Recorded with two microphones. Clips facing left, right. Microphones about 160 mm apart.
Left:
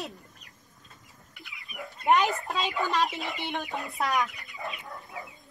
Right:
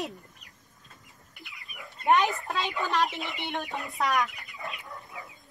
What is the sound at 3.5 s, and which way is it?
Speech, centre (ahead or behind).